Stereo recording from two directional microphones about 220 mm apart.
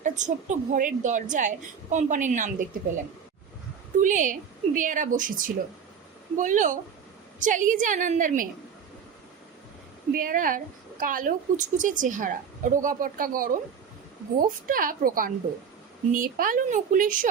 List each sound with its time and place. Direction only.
0.0 s a woman's voice: 35° right (ahead or behind)
4.0 s a woman's voice: 35° right (ahead or behind)
10.1 s a woman's voice: 40° right (ahead or behind)